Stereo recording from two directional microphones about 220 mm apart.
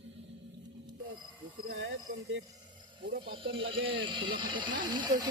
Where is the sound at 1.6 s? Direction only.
60° right (ahead or behind).